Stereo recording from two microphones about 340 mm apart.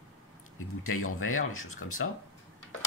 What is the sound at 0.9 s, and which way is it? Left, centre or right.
Speech, left.